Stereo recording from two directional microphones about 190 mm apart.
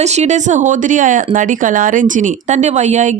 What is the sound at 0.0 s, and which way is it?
Speech, 35° right (ahead or behind).